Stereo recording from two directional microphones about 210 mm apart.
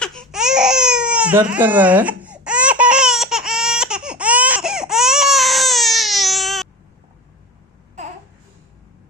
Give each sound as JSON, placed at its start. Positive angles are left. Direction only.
{"t": 0.0, "sound": "baby cry", "side_deg": 0}
{"t": 8.0, "sound": "babbling", "side_deg": -35}